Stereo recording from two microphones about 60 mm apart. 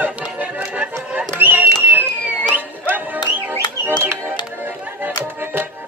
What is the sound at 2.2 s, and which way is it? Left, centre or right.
Music, right.